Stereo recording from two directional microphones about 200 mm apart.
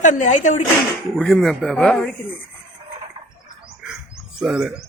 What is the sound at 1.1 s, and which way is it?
Speech, centre (ahead or behind).